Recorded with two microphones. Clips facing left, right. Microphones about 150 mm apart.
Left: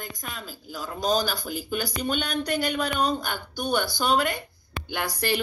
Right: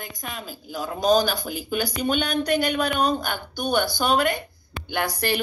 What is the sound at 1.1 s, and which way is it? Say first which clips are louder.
Speech: right 6 dB; 55° right (ahead or behind).